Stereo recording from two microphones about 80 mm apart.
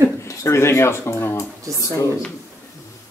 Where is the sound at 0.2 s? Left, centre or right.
Left.